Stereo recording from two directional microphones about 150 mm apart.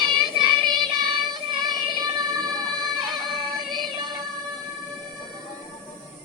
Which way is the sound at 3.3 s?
30° right (ahead or behind).